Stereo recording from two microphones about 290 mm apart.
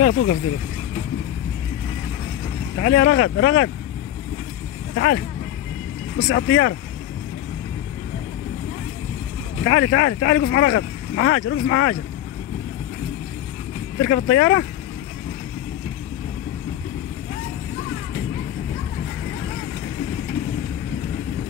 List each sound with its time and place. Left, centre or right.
0.0 s speech: left
2.8 s speech: left
4.9 s speech: left
6.2 s speech: left
9.7 s speech: left
13.9 s speech: left